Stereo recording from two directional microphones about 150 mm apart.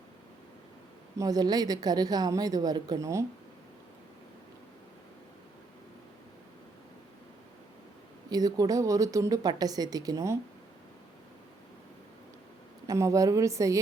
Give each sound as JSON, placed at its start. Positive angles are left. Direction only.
{"t": 1.2, "sound": "a woman's voice", "side_deg": -25}
{"t": 8.3, "sound": "a woman's voice", "side_deg": -25}
{"t": 12.9, "sound": "a woman's voice", "side_deg": -20}